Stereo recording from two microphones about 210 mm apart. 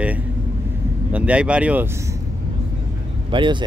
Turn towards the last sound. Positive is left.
turn(degrees=-20)  # may be behind; listen again after turning